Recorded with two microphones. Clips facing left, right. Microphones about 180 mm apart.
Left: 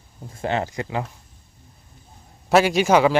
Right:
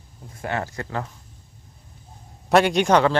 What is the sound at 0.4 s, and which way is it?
Speech, 20° left (ahead or behind).